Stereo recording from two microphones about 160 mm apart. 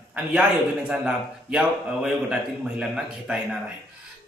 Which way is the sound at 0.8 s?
5° right (ahead or behind).